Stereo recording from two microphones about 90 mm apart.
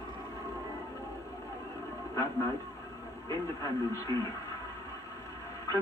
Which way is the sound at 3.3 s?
40° left (ahead or behind).